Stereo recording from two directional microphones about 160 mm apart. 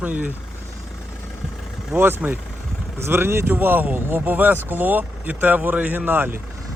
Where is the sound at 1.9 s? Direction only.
10° right (ahead or behind).